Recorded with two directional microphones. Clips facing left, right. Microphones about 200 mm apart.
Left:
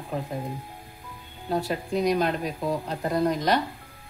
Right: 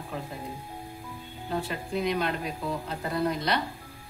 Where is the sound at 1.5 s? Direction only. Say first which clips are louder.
Left 4 dB; 40° left (ahead or behind).